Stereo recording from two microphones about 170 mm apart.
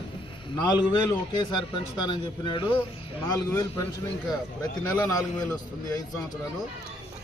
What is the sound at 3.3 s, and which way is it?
Speech, 20° left (ahead or behind).